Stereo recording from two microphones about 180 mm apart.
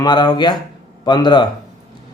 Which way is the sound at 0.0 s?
25° left (ahead or behind).